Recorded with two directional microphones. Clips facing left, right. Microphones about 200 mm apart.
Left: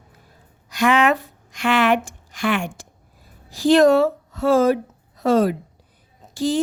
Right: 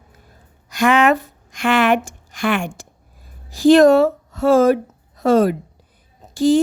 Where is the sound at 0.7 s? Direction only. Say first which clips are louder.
Right 3 dB; 50° right (ahead or behind).